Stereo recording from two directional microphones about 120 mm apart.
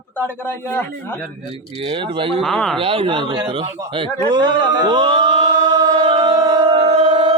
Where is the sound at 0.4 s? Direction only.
15° left (ahead or behind).